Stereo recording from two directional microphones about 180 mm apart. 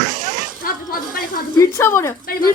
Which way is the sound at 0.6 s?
50° left (ahead or behind).